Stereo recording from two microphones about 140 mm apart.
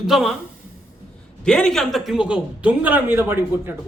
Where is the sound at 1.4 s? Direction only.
5° left (ahead or behind); by 3.7 s 15° right (ahead or behind).